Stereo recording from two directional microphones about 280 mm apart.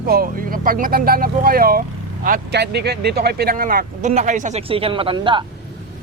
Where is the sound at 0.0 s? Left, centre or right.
Right; by 5.5 s centre.